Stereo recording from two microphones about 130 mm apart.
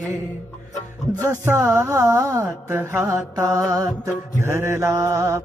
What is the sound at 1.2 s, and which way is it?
Music, 20° right (ahead or behind).